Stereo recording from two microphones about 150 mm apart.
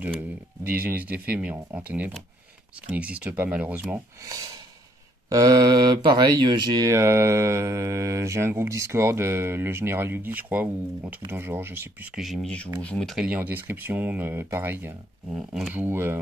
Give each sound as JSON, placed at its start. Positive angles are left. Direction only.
{"t": 0.7, "sound": "speech", "side_deg": -10}
{"t": 4.2, "sound": "speech", "side_deg": -25}
{"t": 12.2, "sound": "speech", "side_deg": 0}
{"t": 13.3, "sound": "speech", "side_deg": -10}